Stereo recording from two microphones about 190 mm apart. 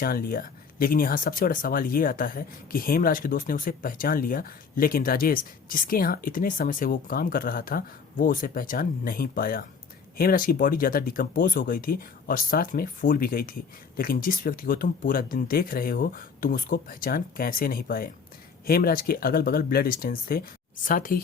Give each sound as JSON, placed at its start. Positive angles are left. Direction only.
{"t": 0.0, "sound": "speech", "side_deg": 50}